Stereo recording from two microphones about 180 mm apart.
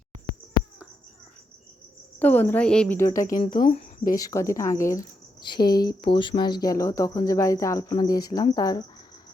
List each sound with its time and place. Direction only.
2.1 s a woman's voice: 10° left (ahead or behind)
3.2 s speech: 50° left (ahead or behind)
4.2 s a woman's voice: 15° left (ahead or behind)